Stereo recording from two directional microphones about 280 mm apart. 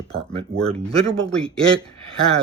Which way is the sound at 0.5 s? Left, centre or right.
Centre.